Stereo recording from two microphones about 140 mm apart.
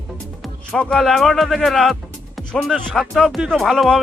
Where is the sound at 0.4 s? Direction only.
5° left (ahead or behind).